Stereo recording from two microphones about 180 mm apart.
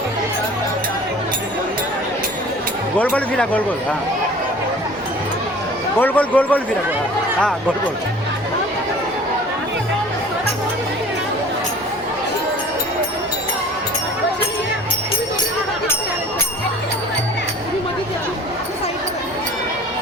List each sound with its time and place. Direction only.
3.0 s a man's voice: 10° left (ahead or behind)
6.0 s a man's voice: 10° left (ahead or behind)